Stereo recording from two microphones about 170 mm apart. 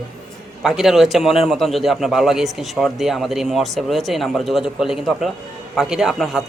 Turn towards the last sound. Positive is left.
turn(degrees=0)  # may be behind; listen again after turning